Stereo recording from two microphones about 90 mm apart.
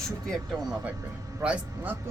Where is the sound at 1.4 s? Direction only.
15° right (ahead or behind).